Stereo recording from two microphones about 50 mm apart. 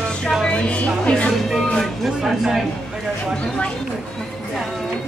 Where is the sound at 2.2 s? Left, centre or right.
Centre.